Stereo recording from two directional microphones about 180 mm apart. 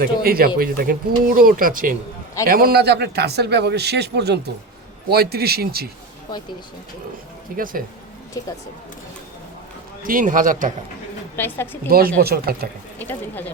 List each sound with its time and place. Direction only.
0.0 s a man's voice: 55° right (ahead or behind)
7.5 s speech: 50° right (ahead or behind)
10.0 s speech: 50° right (ahead or behind)
11.3 s speech: 10° left (ahead or behind)
11.9 s a man's voice: 55° right (ahead or behind)
13.0 s speech: 10° left (ahead or behind)